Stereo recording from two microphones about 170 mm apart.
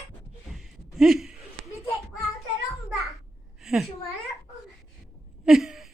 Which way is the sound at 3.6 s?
Centre (ahead or behind).